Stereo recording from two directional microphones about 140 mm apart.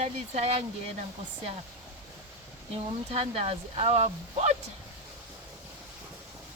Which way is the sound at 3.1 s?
45° right (ahead or behind).